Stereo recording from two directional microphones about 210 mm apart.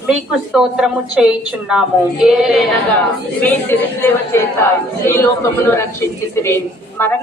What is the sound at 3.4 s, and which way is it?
Speech, 10° left (ahead or behind).